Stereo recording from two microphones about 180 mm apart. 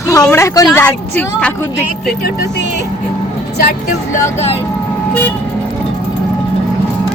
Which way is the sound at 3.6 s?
55° left (ahead or behind).